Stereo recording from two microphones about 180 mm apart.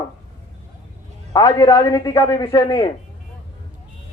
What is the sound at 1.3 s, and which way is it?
Speech, 20° left (ahead or behind).